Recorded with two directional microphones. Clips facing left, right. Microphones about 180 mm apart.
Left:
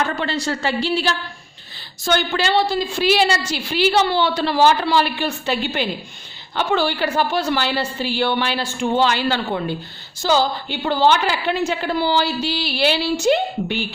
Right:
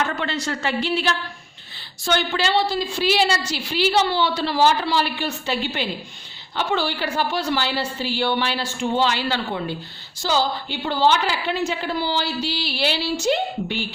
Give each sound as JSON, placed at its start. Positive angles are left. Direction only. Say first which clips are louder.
{"t": 0.0, "sound": "a sound", "louder": "left 2 dB", "side_deg": 35}
{"t": 0.4, "sound": "a woman's voice", "louder": "left 2 dB", "side_deg": 35}
{"t": 2.0, "sound": "a woman's voice", "louder": "left 2 dB", "side_deg": 50}